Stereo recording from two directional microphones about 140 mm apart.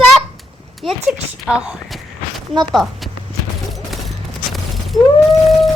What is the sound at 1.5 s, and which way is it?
Walk, 5° right (ahead or behind).